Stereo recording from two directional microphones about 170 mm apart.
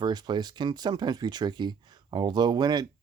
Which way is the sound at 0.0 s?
25° right (ahead or behind).